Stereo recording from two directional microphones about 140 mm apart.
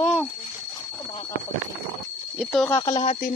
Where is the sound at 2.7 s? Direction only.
35° left (ahead or behind).